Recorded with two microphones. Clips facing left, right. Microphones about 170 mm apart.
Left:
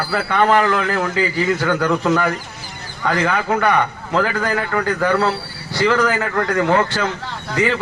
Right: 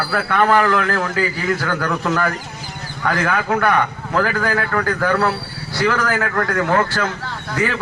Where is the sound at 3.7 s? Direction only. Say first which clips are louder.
Left 1 dB; 15° left (ahead or behind).